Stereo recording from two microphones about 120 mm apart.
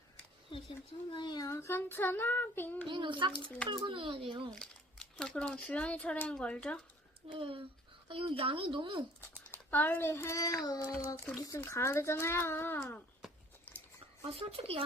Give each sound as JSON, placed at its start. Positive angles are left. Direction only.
{"t": 1.1, "sound": "speech", "side_deg": 40}
{"t": 1.5, "sound": "a child's voice", "side_deg": 25}
{"t": 2.8, "sound": "speech", "side_deg": -45}
{"t": 4.5, "sound": "a child's voice", "side_deg": 5}
{"t": 7.3, "sound": "speech", "side_deg": -45}
{"t": 9.5, "sound": "a child's voice", "side_deg": 15}
{"t": 13.7, "sound": "a sound", "side_deg": 15}
{"t": 14.2, "sound": "speech", "side_deg": -50}